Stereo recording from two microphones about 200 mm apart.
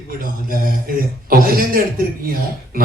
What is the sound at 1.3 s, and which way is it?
Speech, 45° right (ahead or behind).